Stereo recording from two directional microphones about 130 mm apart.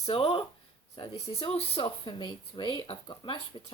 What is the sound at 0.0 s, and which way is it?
Speech, 50° left (ahead or behind).